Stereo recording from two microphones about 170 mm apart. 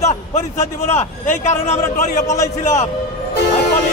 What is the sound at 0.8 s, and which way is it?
A man's voice, 40° left (ahead or behind).